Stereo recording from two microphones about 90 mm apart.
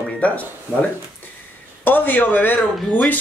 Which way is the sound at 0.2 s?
15° left (ahead or behind).